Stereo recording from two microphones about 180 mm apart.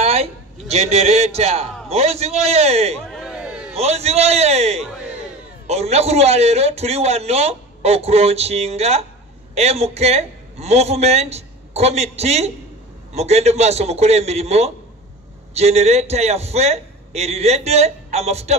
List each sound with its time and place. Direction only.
0.0 s a man's voice: 35° right (ahead or behind)
3.0 s a sound: centre (ahead or behind)
3.7 s a man's voice: 35° right (ahead or behind)